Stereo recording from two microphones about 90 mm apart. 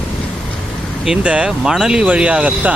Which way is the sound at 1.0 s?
10° right (ahead or behind).